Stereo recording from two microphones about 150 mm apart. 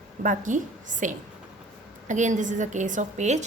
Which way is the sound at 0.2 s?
60° right (ahead or behind).